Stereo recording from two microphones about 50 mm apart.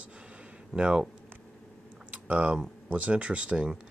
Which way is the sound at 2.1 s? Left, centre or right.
Right.